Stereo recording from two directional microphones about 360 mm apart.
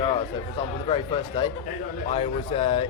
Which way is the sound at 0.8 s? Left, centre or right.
Centre.